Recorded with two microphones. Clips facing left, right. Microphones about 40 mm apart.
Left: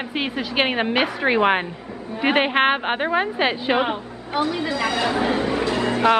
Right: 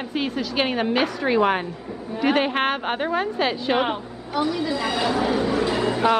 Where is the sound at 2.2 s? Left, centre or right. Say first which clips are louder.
Left 2 dB; left.